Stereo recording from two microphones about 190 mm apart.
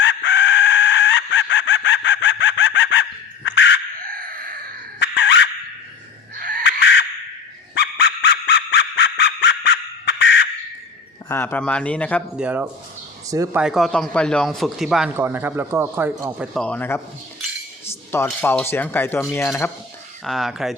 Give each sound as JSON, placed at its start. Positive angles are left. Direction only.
{"t": 0.0, "sound": "chicken", "side_deg": 70}
{"t": 4.0, "sound": "a sound", "side_deg": -50}
{"t": 4.9, "sound": "dog", "side_deg": 65}
{"t": 6.3, "sound": "chicken", "side_deg": -50}
{"t": 6.7, "sound": "crow", "side_deg": 65}
{"t": 7.8, "sound": "a sound", "side_deg": 65}
{"t": 11.3, "sound": "speech", "side_deg": 10}
{"t": 12.4, "sound": "speech", "side_deg": -10}
{"t": 13.6, "sound": "speech", "side_deg": 0}
{"t": 16.6, "sound": "a man's voice", "side_deg": 5}
{"t": 20.2, "sound": "speech", "side_deg": 0}